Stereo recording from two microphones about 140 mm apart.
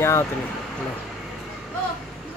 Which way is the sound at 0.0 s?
20° left (ahead or behind).